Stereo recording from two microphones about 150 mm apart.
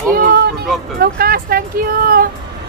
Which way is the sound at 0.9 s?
90° right.